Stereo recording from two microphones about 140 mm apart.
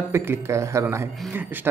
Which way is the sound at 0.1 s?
20° right (ahead or behind).